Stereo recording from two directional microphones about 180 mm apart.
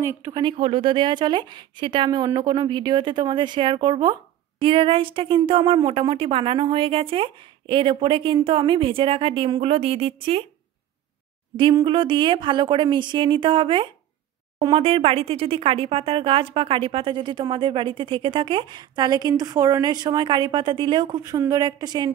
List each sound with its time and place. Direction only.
0.2 s speech: 25° right (ahead or behind)
11.5 s speech: 30° right (ahead or behind)